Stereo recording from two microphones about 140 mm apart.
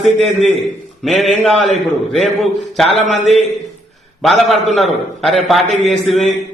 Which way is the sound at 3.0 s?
55° right (ahead or behind).